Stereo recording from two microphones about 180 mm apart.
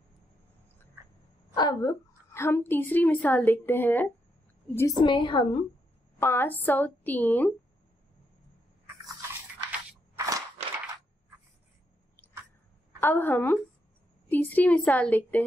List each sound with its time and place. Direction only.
1.5 s a woman's voice: 20° left (ahead or behind)
6.1 s a woman's voice: 15° left (ahead or behind)
9.7 s a sound: 15° right (ahead or behind)
13.0 s a woman's voice: 10° left (ahead or behind)